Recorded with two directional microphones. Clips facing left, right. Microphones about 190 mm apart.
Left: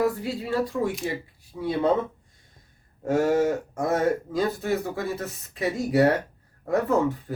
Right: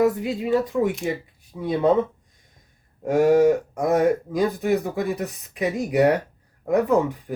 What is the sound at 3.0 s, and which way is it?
Speech, 15° right (ahead or behind).